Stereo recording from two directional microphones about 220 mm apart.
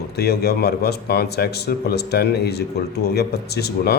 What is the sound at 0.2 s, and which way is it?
Speech, 45° left (ahead or behind).